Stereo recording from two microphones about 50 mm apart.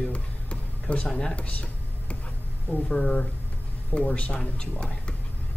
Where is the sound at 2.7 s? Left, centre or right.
Centre.